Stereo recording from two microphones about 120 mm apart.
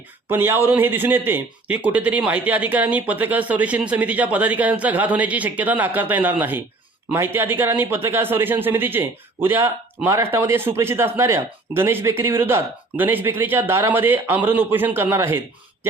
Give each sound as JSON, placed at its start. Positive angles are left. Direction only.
{"t": 0.3, "sound": "a man's voice", "side_deg": -20}